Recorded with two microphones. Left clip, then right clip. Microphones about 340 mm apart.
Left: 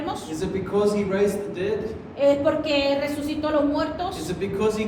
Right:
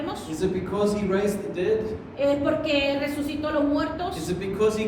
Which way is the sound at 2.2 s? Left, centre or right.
Left.